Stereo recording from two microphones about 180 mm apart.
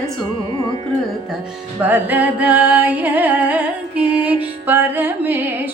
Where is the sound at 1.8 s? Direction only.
10° right (ahead or behind).